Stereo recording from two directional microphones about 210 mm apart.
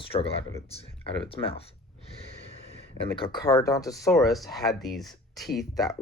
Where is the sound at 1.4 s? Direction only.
15° left (ahead or behind).